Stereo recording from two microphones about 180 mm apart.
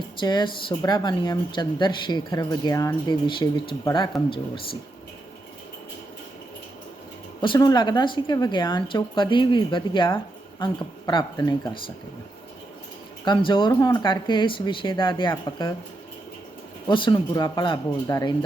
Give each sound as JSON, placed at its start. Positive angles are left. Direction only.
{"t": 0.2, "sound": "a woman's voice", "side_deg": 25}
{"t": 7.4, "sound": "a woman's voice", "side_deg": 25}
{"t": 13.2, "sound": "a woman's voice", "side_deg": 25}
{"t": 16.8, "sound": "a woman's voice", "side_deg": 25}